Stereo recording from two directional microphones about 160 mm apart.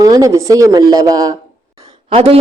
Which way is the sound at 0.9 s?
20° right (ahead or behind).